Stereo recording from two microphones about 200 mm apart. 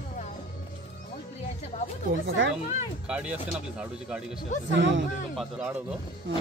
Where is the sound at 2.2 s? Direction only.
70° right (ahead or behind).